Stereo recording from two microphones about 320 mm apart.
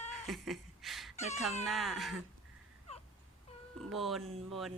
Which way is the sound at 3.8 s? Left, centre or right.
Centre.